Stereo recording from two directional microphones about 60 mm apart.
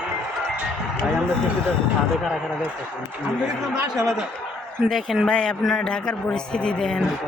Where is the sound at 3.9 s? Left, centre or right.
Centre.